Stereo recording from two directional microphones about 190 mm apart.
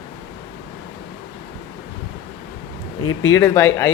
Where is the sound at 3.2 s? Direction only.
15° left (ahead or behind).